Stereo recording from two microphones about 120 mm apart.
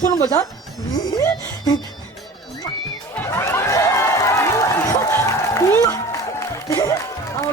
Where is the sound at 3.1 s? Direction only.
20° left (ahead or behind).